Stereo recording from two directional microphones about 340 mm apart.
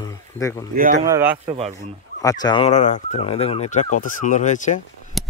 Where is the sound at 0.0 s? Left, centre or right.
Centre.